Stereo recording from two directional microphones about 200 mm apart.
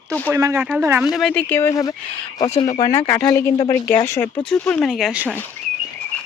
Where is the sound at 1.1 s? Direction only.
5° left (ahead or behind).